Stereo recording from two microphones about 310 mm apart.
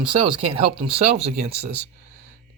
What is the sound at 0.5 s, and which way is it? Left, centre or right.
Speech, centre.